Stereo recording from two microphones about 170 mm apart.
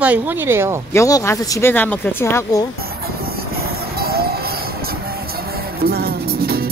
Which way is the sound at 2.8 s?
65° right (ahead or behind).